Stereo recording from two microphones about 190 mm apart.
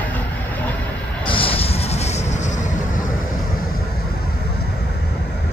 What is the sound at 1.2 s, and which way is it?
Music, 30° left (ahead or behind).